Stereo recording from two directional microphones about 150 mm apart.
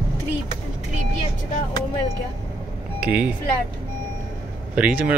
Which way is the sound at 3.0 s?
10° right (ahead or behind).